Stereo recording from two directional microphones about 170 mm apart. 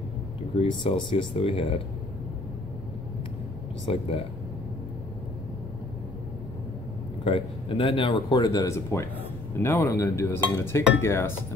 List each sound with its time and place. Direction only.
0.6 s speech: 30° left (ahead or behind)
3.8 s speech: 35° left (ahead or behind)
7.2 s speech: 30° left (ahead or behind); by 11.3 s 15° left (ahead or behind)